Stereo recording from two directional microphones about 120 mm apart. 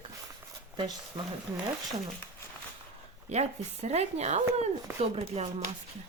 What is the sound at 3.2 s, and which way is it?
Speech, 65° right (ahead or behind).